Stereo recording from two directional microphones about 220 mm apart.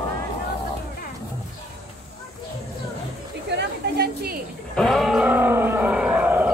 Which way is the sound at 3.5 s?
50° right (ahead or behind).